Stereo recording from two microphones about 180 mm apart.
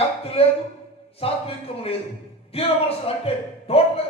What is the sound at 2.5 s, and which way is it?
A man's voice, 35° left (ahead or behind).